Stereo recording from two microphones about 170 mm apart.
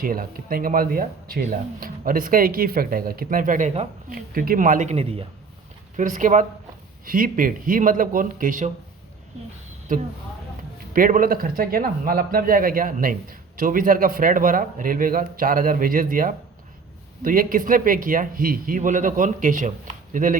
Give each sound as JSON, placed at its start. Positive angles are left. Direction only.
{"t": 0.0, "sound": "a man's voice", "side_deg": -55}
{"t": 6.0, "sound": "a man's voice", "side_deg": -50}
{"t": 9.9, "sound": "a man's voice", "side_deg": -55}